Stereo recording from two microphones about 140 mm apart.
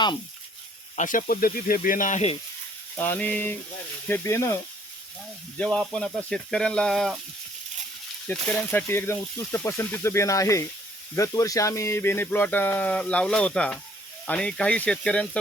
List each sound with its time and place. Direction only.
0.9 s speech: 70° left (ahead or behind)
3.0 s speech: 10° left (ahead or behind)
5.5 s speech: 5° left (ahead or behind)
8.3 s speech: 15° left (ahead or behind)